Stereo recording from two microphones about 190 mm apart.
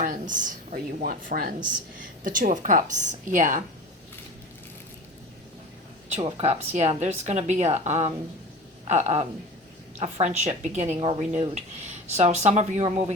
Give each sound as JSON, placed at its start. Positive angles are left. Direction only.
{"t": 0.0, "sound": "a woman's voice", "side_deg": -45}
{"t": 6.1, "sound": "speech", "side_deg": -35}